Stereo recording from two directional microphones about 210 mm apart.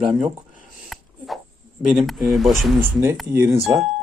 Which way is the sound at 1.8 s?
Centre (ahead or behind).